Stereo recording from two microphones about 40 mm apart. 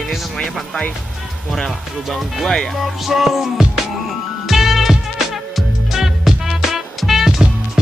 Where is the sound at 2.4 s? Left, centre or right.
Centre.